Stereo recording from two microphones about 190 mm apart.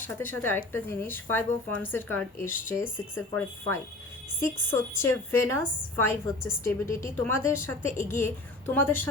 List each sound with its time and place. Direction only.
0.2 s a woman's voice: 10° left (ahead or behind)